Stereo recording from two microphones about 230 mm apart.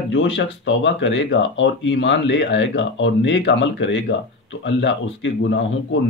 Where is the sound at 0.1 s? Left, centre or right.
Left.